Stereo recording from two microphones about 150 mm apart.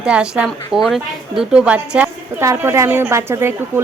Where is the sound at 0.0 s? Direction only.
5° right (ahead or behind).